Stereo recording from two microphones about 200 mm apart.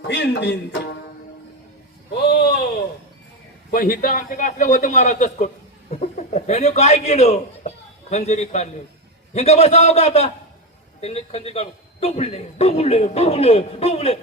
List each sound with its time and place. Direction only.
0.1 s speech: 55° left (ahead or behind)
2.3 s a sound: 55° left (ahead or behind)
3.7 s a man's voice: 45° left (ahead or behind); by 14.2 s 30° left (ahead or behind)